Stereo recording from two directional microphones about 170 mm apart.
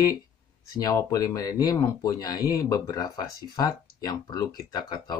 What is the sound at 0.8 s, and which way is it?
Speech, 20° left (ahead or behind).